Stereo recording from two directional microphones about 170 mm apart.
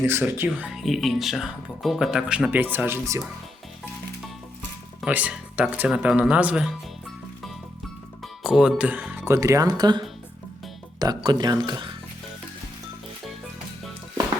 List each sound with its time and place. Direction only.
0.0 s speech: 15° right (ahead or behind)
4.9 s speech: 10° right (ahead or behind)
8.2 s speech: 5° right (ahead or behind); by 10.0 s 25° right (ahead or behind)
11.0 s speech: 25° right (ahead or behind)